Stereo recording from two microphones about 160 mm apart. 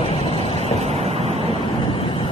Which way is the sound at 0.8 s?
40° right (ahead or behind).